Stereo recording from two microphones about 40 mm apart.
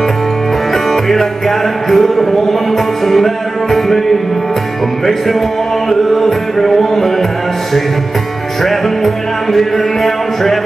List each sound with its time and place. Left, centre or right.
1.9 s music: centre
6.2 s music: centre
8.6 s music: centre